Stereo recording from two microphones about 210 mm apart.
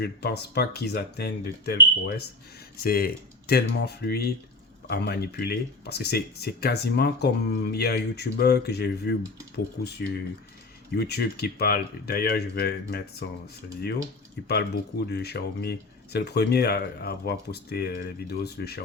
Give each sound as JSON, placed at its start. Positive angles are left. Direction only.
{"t": 0.0, "sound": "speech", "side_deg": 50}
{"t": 10.9, "sound": "speech", "side_deg": 50}
{"t": 14.4, "sound": "speech", "side_deg": 50}